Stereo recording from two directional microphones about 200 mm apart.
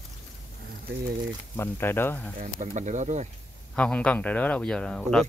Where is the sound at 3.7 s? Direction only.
5° left (ahead or behind).